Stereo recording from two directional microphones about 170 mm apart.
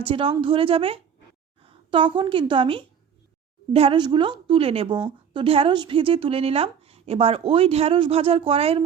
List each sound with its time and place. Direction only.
0.0 s a woman's voice: 30° right (ahead or behind)